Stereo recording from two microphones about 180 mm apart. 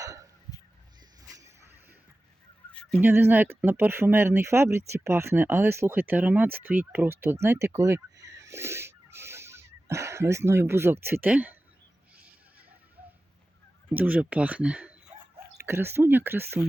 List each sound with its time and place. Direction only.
0.0 s fowl: 20° right (ahead or behind)
1.3 s a sound: 20° right (ahead or behind)
3.0 s speech: 10° right (ahead or behind)
13.9 s speech: 10° right (ahead or behind)